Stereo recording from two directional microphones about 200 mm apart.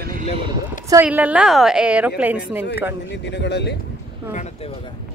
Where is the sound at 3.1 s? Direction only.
60° left (ahead or behind).